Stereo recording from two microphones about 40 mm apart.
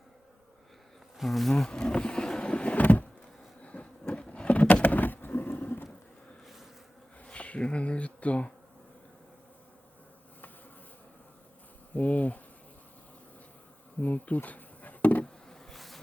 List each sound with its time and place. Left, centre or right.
1.2 s speech: centre
1.5 s vehicle: centre
2.7 s power windows: left
3.6 s a sound: left
4.7 s a sound: left
7.3 s bee: left
11.9 s insect: left
14.0 s insect: left
15.7 s bee: centre